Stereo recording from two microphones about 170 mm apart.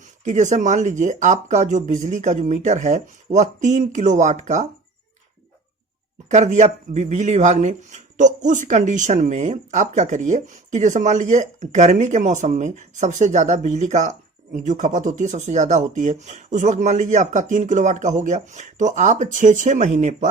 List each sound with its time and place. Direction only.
0.0 s speech: 45° right (ahead or behind)
6.2 s speech: 45° right (ahead or behind)